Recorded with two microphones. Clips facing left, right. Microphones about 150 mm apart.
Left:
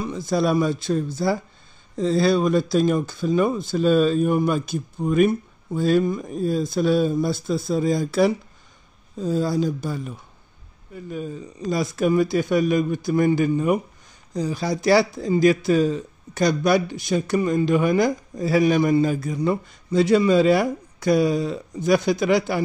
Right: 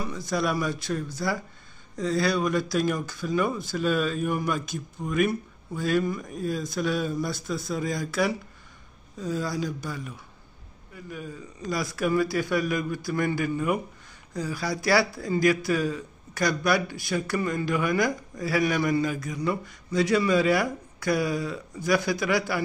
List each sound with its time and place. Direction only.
0.0 s speech: 25° left (ahead or behind)